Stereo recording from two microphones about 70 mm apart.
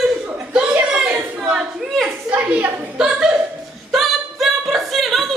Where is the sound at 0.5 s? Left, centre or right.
Centre.